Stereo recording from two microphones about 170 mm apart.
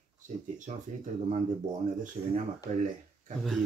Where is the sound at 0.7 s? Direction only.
45° right (ahead or behind).